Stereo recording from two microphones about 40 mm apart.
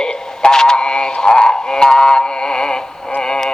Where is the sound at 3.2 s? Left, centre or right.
Centre.